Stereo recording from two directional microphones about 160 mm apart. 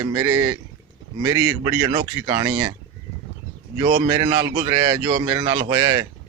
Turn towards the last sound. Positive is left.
turn(degrees=-25)  # may be behind; listen again after turning